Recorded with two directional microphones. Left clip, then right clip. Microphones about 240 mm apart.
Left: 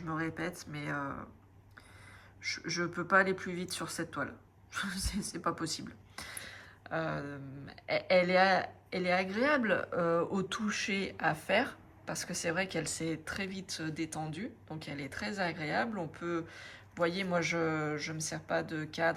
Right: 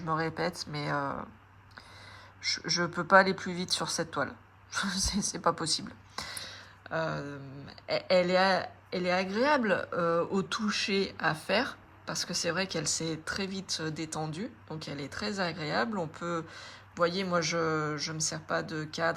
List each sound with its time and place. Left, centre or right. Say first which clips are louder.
0.0 s speech: right 6 dB; centre
2.4 s a woman's voice: right 5 dB; centre